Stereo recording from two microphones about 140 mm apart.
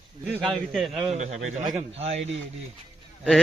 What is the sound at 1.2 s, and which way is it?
A man's voice, 55° right (ahead or behind).